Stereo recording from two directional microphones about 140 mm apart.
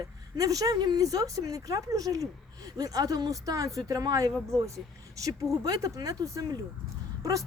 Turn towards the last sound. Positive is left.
turn(degrees=-25)  # may be behind; listen again after turning